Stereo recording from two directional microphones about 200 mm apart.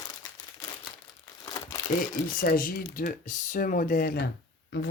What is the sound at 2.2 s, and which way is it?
Speech, 45° left (ahead or behind).